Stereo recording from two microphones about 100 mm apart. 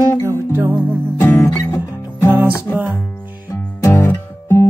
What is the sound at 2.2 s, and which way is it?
Music, 20° right (ahead or behind).